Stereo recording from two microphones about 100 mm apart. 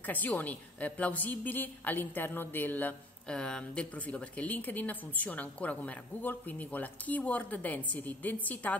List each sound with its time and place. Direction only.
0.0 s a woman's voice: 15° left (ahead or behind)